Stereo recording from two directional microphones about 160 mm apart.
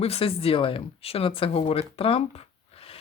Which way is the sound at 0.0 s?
35° left (ahead or behind).